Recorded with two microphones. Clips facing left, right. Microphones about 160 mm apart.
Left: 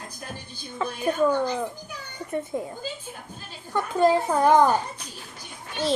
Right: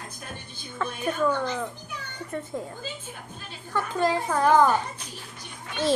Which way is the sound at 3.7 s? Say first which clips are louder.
Left 4 dB; 15° left (ahead or behind).